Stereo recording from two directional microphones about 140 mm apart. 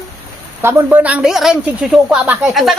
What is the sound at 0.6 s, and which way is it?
Speech, 10° right (ahead or behind).